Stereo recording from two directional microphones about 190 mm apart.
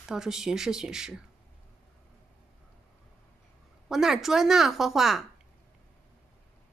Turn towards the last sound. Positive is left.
turn(degrees=0)  # may be behind; listen again after turning